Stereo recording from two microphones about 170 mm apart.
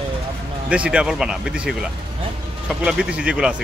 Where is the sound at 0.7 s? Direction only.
5° right (ahead or behind).